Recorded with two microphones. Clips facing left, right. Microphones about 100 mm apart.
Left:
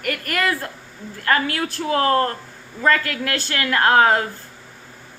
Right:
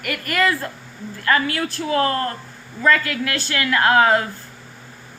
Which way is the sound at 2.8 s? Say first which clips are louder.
Right 1 dB; 50° left (ahead or behind).